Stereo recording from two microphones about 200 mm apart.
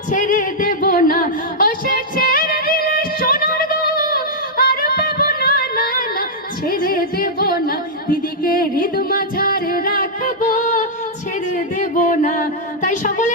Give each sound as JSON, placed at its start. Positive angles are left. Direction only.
{"t": 0.1, "sound": "music", "side_deg": 40}
{"t": 8.8, "sound": "music", "side_deg": 45}
{"t": 11.5, "sound": "a sound", "side_deg": 40}